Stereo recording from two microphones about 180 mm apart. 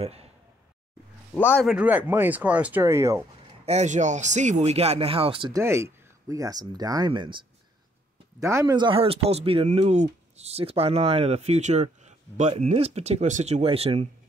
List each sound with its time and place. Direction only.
0.0 s a sound: 35° right (ahead or behind)
1.3 s a man's voice: 10° left (ahead or behind)
1.7 s speech: 5° right (ahead or behind)
3.6 s speech: 40° right (ahead or behind)
5.6 s speech: 15° right (ahead or behind)
8.4 s speech: 15° right (ahead or behind); by 14.0 s 35° right (ahead or behind)